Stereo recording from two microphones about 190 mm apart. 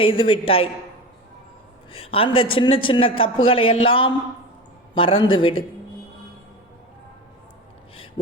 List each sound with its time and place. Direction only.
0.0 s a man's voice: 30° left (ahead or behind)
1.9 s a man's voice: 30° left (ahead or behind)